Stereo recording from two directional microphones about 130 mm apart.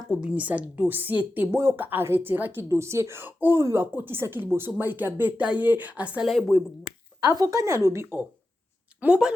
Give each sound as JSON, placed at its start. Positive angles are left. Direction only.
{"t": 0.2, "sound": "speech", "side_deg": -10}
{"t": 7.2, "sound": "speech", "side_deg": -30}
{"t": 9.0, "sound": "speech", "side_deg": -10}